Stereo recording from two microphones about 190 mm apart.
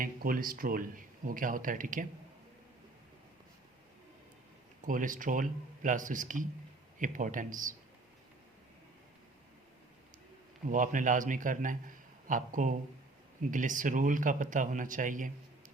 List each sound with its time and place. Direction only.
0.0 s speech: 50° right (ahead or behind)
4.9 s speech: 45° right (ahead or behind)
10.7 s speech: 45° right (ahead or behind)